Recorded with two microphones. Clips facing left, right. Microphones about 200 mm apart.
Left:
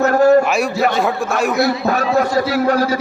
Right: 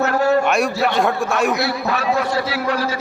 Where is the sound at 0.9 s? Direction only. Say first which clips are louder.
Left 1 dB; centre (ahead or behind).